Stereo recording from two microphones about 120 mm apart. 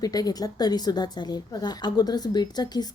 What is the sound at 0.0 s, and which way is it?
Speech, 30° left (ahead or behind).